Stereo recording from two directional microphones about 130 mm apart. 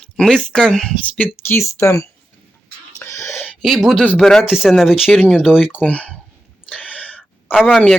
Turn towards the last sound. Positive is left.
turn(degrees=0)  # may be behind; listen again after turning